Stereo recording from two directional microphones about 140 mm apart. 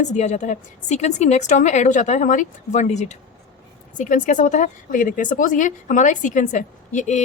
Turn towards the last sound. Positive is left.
turn(degrees=60)  # may be behind; listen again after turning